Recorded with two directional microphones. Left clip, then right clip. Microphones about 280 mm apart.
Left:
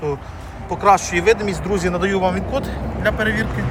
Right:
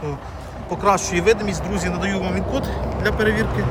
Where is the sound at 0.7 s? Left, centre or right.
Centre.